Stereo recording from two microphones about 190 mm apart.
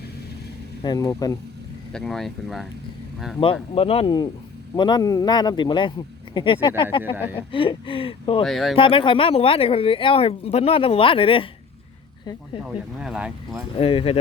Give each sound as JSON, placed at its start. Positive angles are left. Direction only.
{"t": 0.8, "sound": "speech", "side_deg": 20}
{"t": 1.9, "sound": "speech", "side_deg": 0}
{"t": 3.4, "sound": "speech", "side_deg": 30}
{"t": 8.4, "sound": "speech", "side_deg": 0}
{"t": 8.7, "sound": "speech", "side_deg": 30}
{"t": 12.6, "sound": "speech", "side_deg": -5}
{"t": 13.7, "sound": "speech", "side_deg": 30}